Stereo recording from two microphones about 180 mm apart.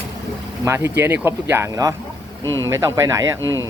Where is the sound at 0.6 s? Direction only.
15° right (ahead or behind).